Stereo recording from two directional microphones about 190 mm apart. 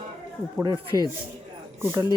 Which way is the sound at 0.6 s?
20° right (ahead or behind).